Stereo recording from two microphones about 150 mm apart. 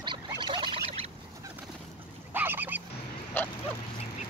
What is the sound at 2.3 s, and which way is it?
Goose, 15° right (ahead or behind).